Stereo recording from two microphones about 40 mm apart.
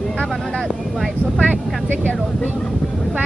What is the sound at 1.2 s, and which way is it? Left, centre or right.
Speech, right.